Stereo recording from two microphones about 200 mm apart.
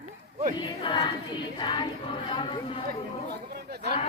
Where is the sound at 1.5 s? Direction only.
25° left (ahead or behind).